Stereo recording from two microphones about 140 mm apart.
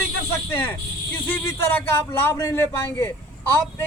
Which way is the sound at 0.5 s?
15° left (ahead or behind).